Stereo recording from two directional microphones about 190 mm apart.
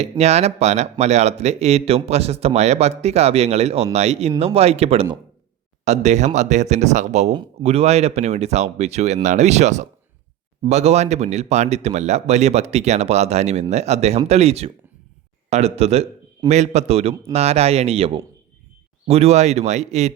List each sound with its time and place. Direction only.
0.0 s speech: 35° right (ahead or behind)